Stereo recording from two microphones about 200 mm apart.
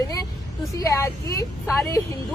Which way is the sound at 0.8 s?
15° left (ahead or behind).